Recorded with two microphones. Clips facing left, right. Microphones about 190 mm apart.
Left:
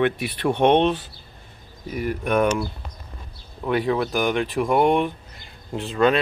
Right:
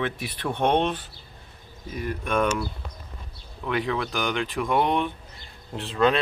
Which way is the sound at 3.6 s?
40° left (ahead or behind).